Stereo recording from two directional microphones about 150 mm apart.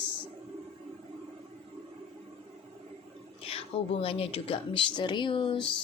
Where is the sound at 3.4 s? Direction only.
40° left (ahead or behind).